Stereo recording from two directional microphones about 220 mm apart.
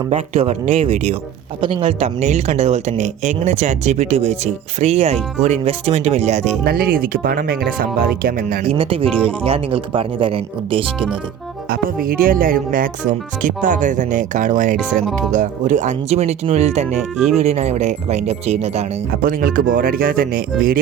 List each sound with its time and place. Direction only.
0.1 s speech: 30° right (ahead or behind)
6.7 s speech: 45° right (ahead or behind)
8.6 s speech: 25° right (ahead or behind)
11.7 s speech: 40° right (ahead or behind)
19.1 s speech: 40° right (ahead or behind)